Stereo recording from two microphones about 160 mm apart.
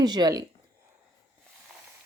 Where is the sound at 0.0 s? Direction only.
25° right (ahead or behind).